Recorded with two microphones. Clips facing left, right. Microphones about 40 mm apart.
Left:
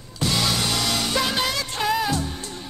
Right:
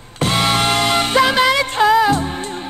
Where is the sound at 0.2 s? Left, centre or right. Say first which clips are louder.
Right 7 dB; right.